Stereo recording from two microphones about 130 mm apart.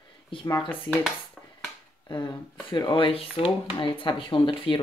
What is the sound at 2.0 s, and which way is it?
Speech, 35° left (ahead or behind).